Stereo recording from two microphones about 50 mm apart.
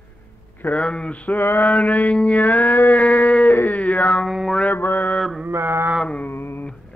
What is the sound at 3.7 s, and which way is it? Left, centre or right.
Dog, left.